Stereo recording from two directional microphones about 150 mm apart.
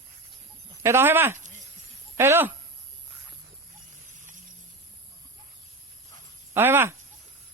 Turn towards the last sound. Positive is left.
turn(degrees=-15)  # may be behind; listen again after turning